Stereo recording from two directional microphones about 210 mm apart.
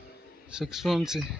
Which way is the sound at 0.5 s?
Centre (ahead or behind).